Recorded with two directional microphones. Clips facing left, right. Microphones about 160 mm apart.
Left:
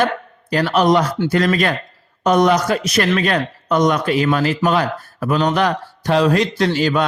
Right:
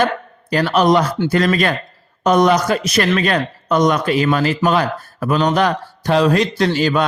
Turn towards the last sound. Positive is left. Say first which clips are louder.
# right 1 dB
turn(degrees=-40)  # may be behind; listen again after turning